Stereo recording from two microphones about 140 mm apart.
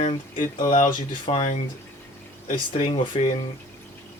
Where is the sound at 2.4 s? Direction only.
65° left (ahead or behind).